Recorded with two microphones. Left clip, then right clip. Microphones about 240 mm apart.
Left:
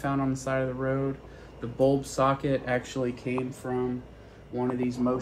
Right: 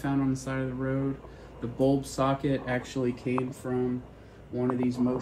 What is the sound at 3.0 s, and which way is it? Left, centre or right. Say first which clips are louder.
Speech: even; left.